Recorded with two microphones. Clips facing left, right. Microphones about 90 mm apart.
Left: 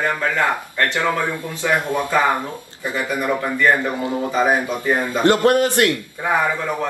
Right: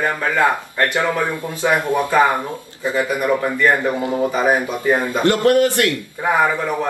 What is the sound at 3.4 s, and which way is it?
Speech, 20° right (ahead or behind).